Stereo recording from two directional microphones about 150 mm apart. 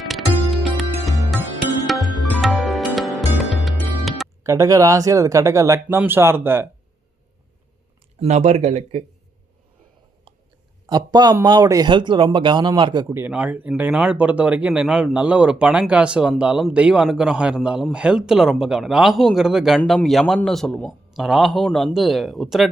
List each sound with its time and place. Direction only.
0.0 s music: centre (ahead or behind)
4.4 s speech: 20° right (ahead or behind)
8.2 s speech: 50° right (ahead or behind)
10.8 s speech: 25° right (ahead or behind)
13.1 s a man's voice: 10° right (ahead or behind)